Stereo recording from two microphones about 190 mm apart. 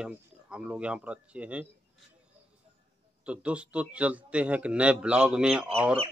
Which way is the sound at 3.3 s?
5° right (ahead or behind).